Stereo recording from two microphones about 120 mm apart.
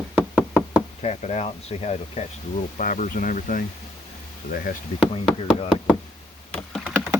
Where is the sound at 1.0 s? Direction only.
75° left (ahead or behind); by 3.5 s 90° left.